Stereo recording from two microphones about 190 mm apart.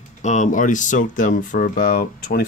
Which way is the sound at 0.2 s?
40° left (ahead or behind).